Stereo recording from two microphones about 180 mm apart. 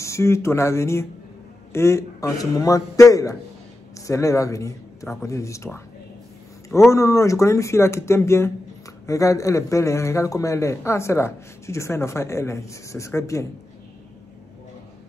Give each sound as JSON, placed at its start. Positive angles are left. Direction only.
{"t": 0.0, "sound": "a man's voice", "side_deg": 15}
{"t": 6.9, "sound": "a man's voice", "side_deg": 15}